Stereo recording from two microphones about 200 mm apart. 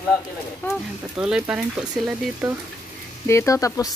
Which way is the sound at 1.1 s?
5° right (ahead or behind).